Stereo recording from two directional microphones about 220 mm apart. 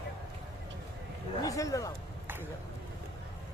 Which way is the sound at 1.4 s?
15° left (ahead or behind).